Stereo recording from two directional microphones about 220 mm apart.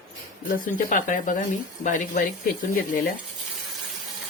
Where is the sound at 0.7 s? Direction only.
35° left (ahead or behind).